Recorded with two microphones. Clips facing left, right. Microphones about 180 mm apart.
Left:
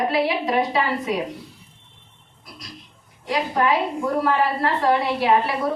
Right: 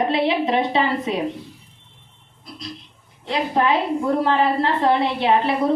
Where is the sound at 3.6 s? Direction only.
25° right (ahead or behind).